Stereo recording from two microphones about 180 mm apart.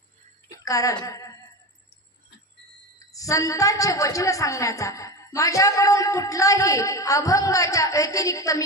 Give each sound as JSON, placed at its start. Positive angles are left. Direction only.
{"t": 0.5, "sound": "a woman's voice", "side_deg": 20}
{"t": 3.0, "sound": "a woman's voice", "side_deg": 20}